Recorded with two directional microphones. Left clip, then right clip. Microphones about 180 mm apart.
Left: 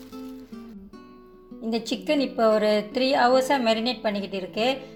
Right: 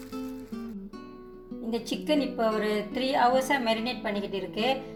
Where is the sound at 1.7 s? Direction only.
55° left (ahead or behind).